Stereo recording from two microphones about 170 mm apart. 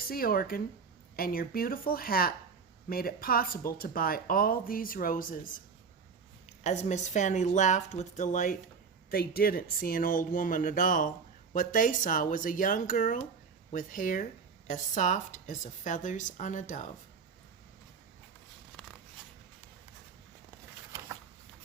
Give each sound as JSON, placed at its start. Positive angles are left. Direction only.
{"t": 0.1, "sound": "speech", "side_deg": 60}
{"t": 6.6, "sound": "speech", "side_deg": 40}
{"t": 9.0, "sound": "speech", "side_deg": 60}